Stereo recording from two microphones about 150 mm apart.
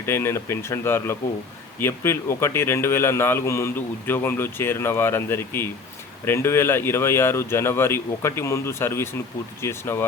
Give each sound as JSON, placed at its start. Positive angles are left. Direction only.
{"t": 0.0, "sound": "speech", "side_deg": 15}